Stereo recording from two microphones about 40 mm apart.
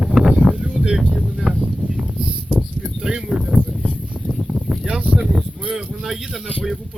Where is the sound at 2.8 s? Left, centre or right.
Centre.